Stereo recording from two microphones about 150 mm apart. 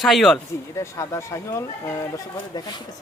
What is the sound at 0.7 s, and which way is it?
Speech, 20° left (ahead or behind).